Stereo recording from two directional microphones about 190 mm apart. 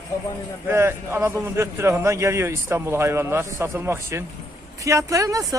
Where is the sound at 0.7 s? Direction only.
10° right (ahead or behind).